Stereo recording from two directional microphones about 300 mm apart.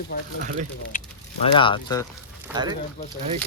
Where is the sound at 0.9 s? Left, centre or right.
Left.